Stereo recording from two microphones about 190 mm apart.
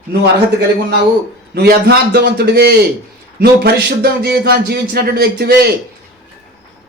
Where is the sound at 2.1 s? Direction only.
60° right (ahead or behind).